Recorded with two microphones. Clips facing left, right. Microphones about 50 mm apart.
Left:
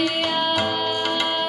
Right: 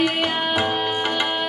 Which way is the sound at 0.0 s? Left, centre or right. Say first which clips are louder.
Right 1 dB; centre.